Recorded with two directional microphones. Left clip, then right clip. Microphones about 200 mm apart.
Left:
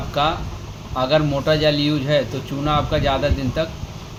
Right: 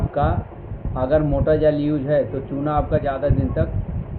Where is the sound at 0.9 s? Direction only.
20° left (ahead or behind).